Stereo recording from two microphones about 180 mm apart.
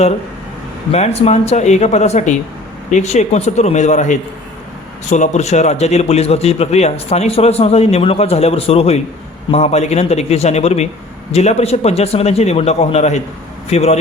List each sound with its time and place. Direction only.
0.9 s a man's voice: 35° left (ahead or behind)